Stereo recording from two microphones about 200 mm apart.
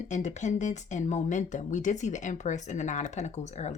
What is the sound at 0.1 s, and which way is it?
A woman's voice, 35° left (ahead or behind).